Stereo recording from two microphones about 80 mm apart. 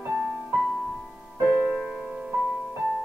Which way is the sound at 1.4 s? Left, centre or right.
Centre.